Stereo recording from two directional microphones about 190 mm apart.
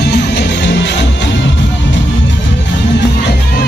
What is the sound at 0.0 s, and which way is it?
Music, 65° left (ahead or behind).